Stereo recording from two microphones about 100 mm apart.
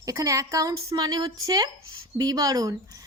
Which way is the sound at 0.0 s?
35° right (ahead or behind).